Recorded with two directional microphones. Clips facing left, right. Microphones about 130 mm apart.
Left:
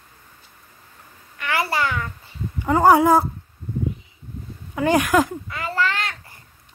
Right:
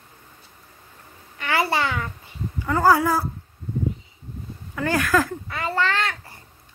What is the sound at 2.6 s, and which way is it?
Speech, 20° left (ahead or behind).